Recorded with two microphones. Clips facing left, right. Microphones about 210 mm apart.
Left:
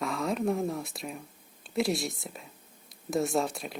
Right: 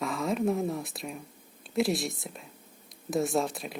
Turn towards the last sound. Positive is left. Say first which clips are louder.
# even
turn(degrees=0)  # may be behind; listen again after turning